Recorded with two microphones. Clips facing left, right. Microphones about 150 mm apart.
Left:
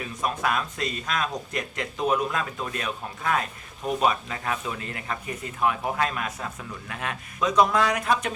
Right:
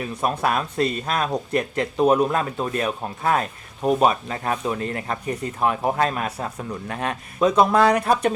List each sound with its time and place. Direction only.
0.2 s speech: 35° right (ahead or behind)